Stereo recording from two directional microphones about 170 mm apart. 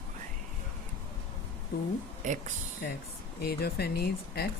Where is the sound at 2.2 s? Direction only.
45° right (ahead or behind).